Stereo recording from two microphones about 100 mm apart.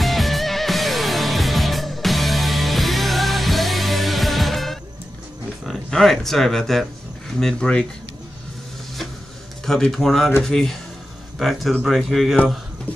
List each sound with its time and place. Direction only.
0.0 s music: centre (ahead or behind)
5.7 s speech: centre (ahead or behind)
9.7 s speech: 5° left (ahead or behind)